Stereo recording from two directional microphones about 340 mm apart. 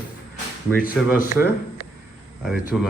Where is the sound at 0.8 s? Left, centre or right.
Left.